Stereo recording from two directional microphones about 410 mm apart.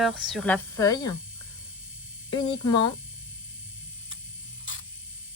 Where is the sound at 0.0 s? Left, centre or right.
Centre.